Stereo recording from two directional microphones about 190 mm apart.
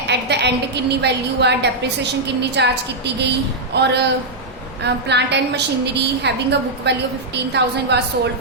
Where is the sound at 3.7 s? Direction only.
65° right (ahead or behind).